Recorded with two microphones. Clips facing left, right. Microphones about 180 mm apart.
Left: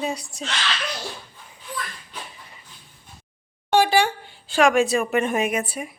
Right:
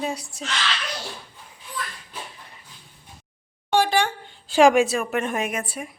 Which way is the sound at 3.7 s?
5° left (ahead or behind).